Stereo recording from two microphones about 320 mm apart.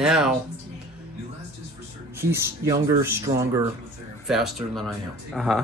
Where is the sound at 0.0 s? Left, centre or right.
Centre.